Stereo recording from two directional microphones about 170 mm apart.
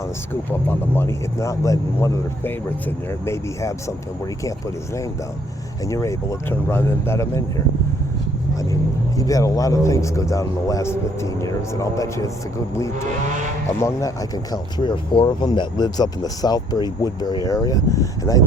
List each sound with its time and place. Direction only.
0.5 s speech: 15° left (ahead or behind)
5.8 s speech: 20° left (ahead or behind)
9.1 s a man's voice: 20° left (ahead or behind)
13.7 s a man's voice: 20° left (ahead or behind)